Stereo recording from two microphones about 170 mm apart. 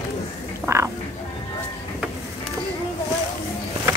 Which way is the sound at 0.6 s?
15° right (ahead or behind).